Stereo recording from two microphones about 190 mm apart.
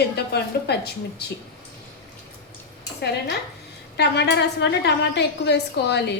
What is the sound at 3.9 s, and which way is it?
A woman's voice, 60° left (ahead or behind).